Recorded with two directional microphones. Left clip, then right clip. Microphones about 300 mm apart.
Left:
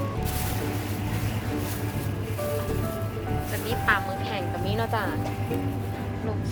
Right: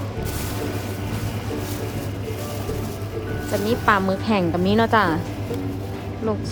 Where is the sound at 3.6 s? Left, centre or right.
Centre.